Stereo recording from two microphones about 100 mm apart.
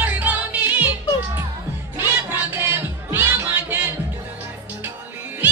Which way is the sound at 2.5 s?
20° right (ahead or behind).